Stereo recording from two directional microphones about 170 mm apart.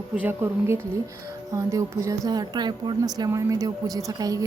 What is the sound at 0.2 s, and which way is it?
A woman's voice, 15° right (ahead or behind).